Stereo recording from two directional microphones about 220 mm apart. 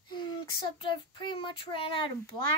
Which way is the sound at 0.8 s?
20° left (ahead or behind).